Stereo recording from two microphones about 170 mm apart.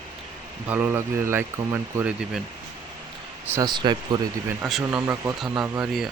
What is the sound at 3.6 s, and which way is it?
Speech, 25° right (ahead or behind).